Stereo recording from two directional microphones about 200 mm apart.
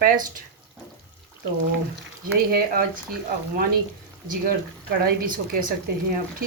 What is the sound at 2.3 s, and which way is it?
Speech, 50° right (ahead or behind).